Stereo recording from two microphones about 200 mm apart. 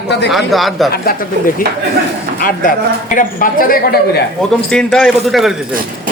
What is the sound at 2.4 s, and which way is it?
A man's voice, 40° left (ahead or behind).